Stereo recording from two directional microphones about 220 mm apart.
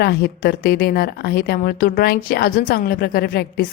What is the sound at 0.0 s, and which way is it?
A woman's voice, 45° left (ahead or behind).